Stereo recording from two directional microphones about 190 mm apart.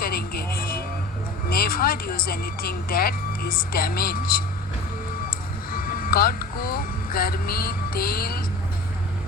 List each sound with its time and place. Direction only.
0.0 s music: 50° left (ahead or behind)
1.5 s speech: 50° left (ahead or behind)
5.7 s speech: 50° left (ahead or behind)